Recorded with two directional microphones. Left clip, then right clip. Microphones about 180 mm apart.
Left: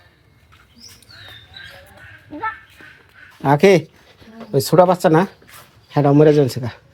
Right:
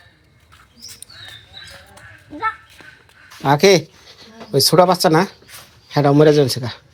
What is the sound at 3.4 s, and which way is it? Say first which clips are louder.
Speech: even; 20° left (ahead or behind).